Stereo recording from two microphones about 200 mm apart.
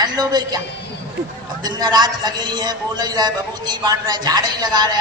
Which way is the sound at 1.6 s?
20° right (ahead or behind).